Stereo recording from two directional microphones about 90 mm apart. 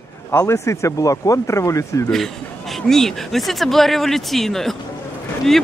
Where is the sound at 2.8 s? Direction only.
5° left (ahead or behind).